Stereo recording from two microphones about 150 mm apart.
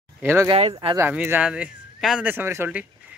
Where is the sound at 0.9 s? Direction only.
15° right (ahead or behind).